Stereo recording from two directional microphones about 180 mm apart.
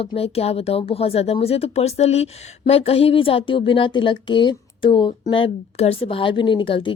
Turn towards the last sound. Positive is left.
turn(degrees=30)  # may be behind; listen again after turning